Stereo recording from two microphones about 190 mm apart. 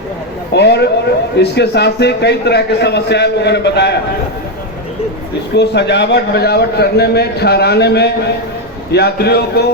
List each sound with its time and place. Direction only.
0.5 s a man's voice: 60° left (ahead or behind)
5.5 s a man's voice: 65° left (ahead or behind)